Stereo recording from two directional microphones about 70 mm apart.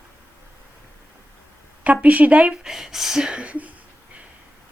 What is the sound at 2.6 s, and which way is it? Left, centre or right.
Speech, centre.